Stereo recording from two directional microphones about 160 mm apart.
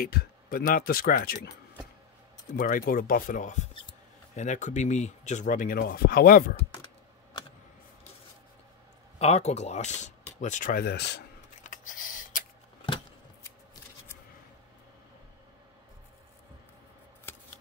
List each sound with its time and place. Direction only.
0.0 s speech: 70° left (ahead or behind)
2.5 s speech: 55° left (ahead or behind)
9.2 s speech: 40° left (ahead or behind); by 11.2 s 90° left
11.6 s a sound: 55° left (ahead or behind)